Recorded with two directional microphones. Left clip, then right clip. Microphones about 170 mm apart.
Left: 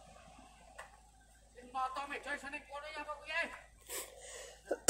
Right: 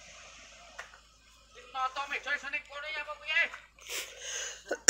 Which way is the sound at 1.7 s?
35° left (ahead or behind).